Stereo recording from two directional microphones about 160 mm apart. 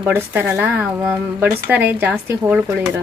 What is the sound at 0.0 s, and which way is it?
Speech, 10° right (ahead or behind).